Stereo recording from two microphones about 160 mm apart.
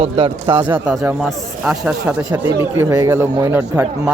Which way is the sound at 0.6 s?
5° right (ahead or behind).